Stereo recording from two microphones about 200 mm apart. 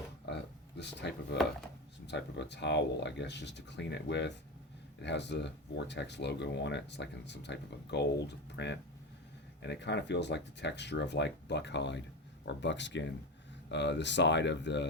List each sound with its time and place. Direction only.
0.8 s speech: 60° left (ahead or behind)